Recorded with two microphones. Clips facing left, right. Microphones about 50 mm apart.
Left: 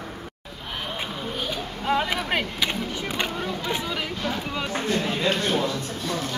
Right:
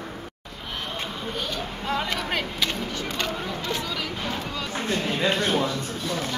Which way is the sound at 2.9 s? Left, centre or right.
Centre.